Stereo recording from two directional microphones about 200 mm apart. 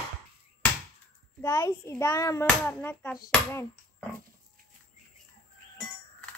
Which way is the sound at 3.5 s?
10° left (ahead or behind).